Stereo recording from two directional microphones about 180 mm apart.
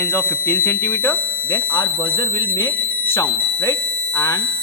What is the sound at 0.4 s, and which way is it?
Speech, 10° left (ahead or behind).